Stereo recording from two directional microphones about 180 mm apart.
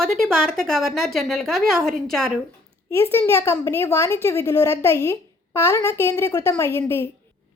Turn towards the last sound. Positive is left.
turn(degrees=15)  # may be behind; listen again after turning